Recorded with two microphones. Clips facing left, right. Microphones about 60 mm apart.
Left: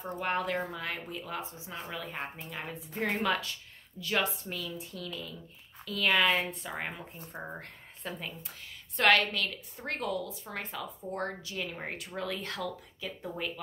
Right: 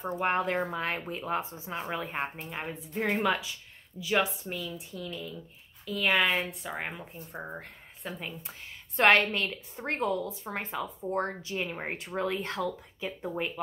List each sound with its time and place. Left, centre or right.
0.2 s a woman's voice: right
3.0 s speech: centre
8.4 s a woman's voice: right